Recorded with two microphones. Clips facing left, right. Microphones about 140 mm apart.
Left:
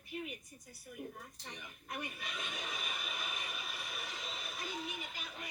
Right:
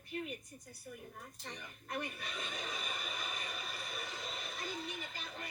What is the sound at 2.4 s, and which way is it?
Vehicle, 5° left (ahead or behind).